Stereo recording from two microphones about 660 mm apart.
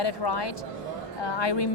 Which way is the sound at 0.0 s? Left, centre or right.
Left.